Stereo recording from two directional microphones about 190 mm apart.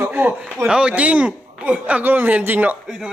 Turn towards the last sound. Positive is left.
turn(degrees=-5)  # may be behind; listen again after turning